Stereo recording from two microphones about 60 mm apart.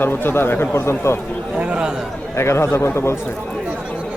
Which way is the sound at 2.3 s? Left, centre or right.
Left.